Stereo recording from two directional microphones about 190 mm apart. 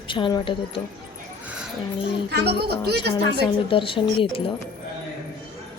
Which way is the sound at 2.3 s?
60° right (ahead or behind).